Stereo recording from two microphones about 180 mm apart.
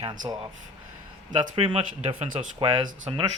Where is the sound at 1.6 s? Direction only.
30° right (ahead or behind).